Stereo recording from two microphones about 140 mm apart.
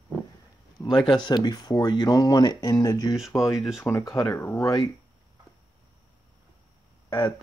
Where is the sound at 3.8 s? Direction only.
20° left (ahead or behind).